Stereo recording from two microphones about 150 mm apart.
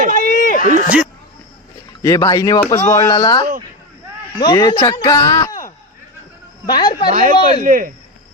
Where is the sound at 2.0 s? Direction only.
20° left (ahead or behind).